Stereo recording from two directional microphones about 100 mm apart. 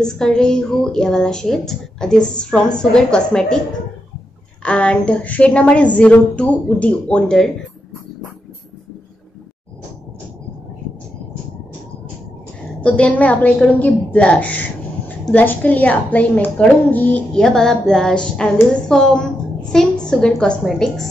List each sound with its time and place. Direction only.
0.0 s a woman's voice: 5° left (ahead or behind)
4.6 s a woman's voice: 10° left (ahead or behind)
12.8 s a woman's voice: 10° left (ahead or behind)